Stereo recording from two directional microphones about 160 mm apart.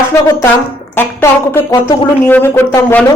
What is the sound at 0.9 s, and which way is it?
A woman's voice, 15° left (ahead or behind).